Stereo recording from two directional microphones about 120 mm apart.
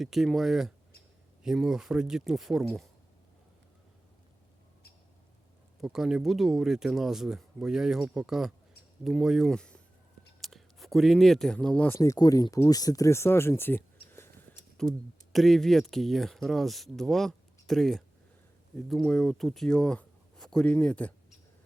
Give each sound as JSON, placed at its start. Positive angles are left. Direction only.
{"t": 0.0, "sound": "speech", "side_deg": 0}
{"t": 5.8, "sound": "speech", "side_deg": -5}
{"t": 11.9, "sound": "speech", "side_deg": 30}
{"t": 14.8, "sound": "speech", "side_deg": 5}